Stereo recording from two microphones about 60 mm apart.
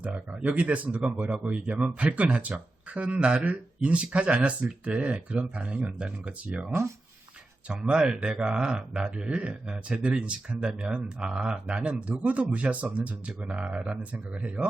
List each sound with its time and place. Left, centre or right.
0.0 s speech: right
7.7 s speech: centre